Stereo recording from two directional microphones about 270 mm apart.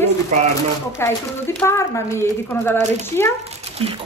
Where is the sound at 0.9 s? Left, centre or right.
Centre.